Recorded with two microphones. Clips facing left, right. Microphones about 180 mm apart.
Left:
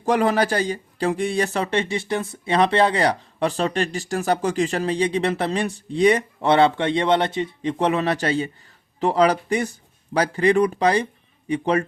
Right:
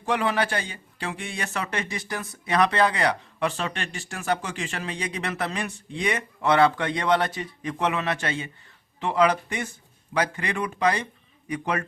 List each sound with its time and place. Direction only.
0.0 s a man's voice: 40° left (ahead or behind)